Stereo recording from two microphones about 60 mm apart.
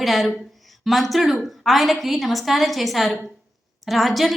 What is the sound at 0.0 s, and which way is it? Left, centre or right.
A woman's voice, centre.